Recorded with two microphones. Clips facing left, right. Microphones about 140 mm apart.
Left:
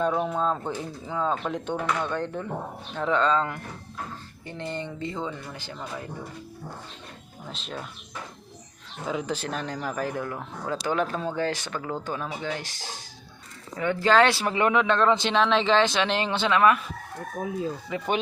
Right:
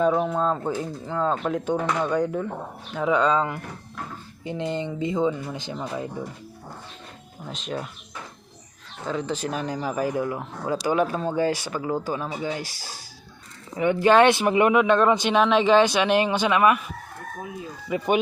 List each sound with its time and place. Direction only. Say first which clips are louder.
0.0 s speech: right 3 dB; 5° right (ahead or behind); by 6.1 s 20° right (ahead or behind)
7.4 s speech: right 5 dB; 5° right (ahead or behind)
9.0 s speech: right 2 dB; 5° left (ahead or behind)
9.5 s speech: right 3 dB; 5° right (ahead or behind)
13.7 s speech: right 3 dB; 15° right (ahead or behind)
17.8 s speech: right 8 dB; 15° right (ahead or behind)